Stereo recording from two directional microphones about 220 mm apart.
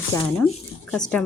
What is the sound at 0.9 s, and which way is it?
Speech, 5° left (ahead or behind).